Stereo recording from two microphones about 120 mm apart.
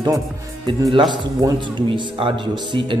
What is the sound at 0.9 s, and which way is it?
A man's voice, 40° right (ahead or behind).